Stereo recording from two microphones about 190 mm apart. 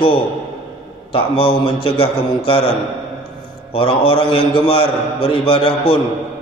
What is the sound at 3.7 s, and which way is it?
A man's voice, 30° left (ahead or behind).